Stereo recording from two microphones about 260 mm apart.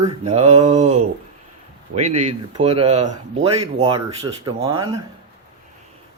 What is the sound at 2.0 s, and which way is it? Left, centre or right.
Speech, right.